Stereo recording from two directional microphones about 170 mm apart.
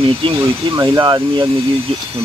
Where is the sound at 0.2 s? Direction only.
25° right (ahead or behind).